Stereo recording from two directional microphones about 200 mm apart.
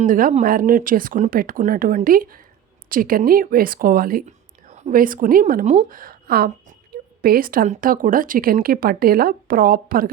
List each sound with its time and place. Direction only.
0.0 s speech: 40° right (ahead or behind)